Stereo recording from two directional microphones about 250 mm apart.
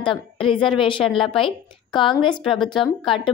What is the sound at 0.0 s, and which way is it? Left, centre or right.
A woman's voice, centre.